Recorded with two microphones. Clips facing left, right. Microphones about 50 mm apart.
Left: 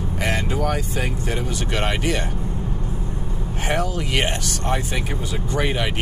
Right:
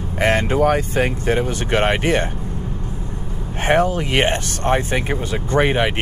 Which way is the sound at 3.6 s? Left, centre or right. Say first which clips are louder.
Right 7 dB; right.